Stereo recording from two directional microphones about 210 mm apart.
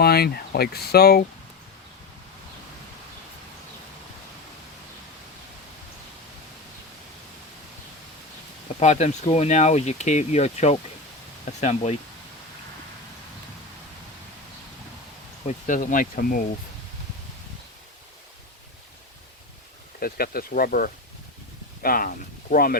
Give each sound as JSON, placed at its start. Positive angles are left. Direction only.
{"t": 0.0, "sound": "speech", "side_deg": 50}
{"t": 8.8, "sound": "speech", "side_deg": 35}
{"t": 15.4, "sound": "speech", "side_deg": 40}
{"t": 20.0, "sound": "speech", "side_deg": 45}